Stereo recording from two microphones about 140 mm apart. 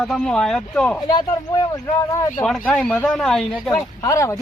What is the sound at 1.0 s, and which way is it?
Speech, 30° left (ahead or behind).